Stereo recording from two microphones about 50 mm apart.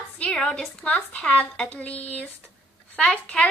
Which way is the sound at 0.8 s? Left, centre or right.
Left.